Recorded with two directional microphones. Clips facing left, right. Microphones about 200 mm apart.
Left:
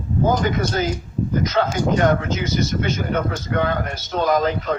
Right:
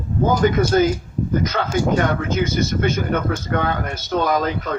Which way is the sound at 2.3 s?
50° right (ahead or behind).